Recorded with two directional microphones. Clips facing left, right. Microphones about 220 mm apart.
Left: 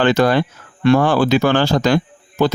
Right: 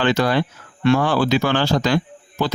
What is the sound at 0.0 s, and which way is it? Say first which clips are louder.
Speech: left 4 dB; 50° left (ahead or behind).